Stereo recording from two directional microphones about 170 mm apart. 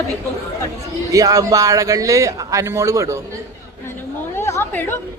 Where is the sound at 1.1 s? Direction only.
20° right (ahead or behind).